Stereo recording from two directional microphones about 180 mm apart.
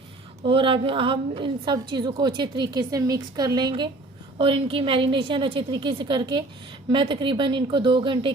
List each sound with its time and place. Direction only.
0.4 s a woman's voice: 30° right (ahead or behind)